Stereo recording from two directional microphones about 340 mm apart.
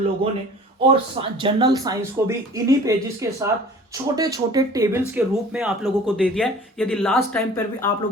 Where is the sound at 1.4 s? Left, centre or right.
Centre.